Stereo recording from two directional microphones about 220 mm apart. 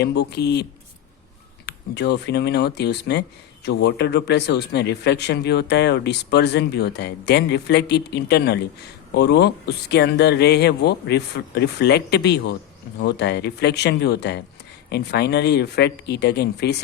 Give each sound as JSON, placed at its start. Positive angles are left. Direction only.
{"t": 0.0, "sound": "speech", "side_deg": 50}
{"t": 1.6, "sound": "speech", "side_deg": 50}